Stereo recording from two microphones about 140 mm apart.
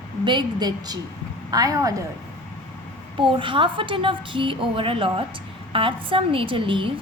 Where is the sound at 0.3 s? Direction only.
30° right (ahead or behind).